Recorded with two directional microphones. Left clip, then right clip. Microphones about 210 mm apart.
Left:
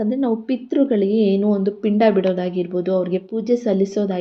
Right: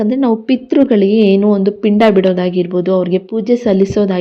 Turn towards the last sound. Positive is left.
turn(degrees=-40)  # may be behind; listen again after turning